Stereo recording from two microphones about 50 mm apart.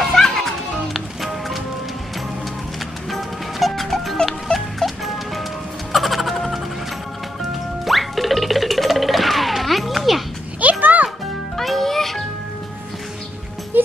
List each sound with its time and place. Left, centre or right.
0.0 s music: centre
3.1 s music: centre
7.8 s music: centre
10.6 s music: right
11.5 s music: centre